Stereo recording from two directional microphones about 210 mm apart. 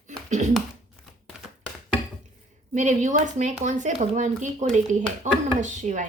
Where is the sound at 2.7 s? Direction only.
35° right (ahead or behind).